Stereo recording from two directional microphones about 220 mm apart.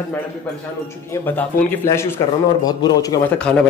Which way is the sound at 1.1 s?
10° left (ahead or behind).